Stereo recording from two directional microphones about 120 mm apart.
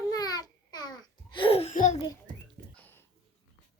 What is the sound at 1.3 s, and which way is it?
Laughter, 50° left (ahead or behind).